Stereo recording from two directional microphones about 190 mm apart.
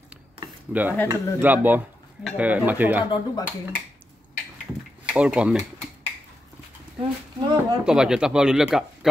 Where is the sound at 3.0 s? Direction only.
25° left (ahead or behind).